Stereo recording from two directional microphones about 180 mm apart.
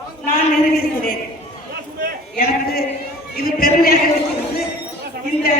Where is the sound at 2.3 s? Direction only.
60° left (ahead or behind).